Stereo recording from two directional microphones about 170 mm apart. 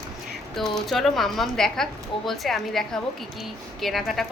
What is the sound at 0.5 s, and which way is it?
A woman's voice, centre (ahead or behind).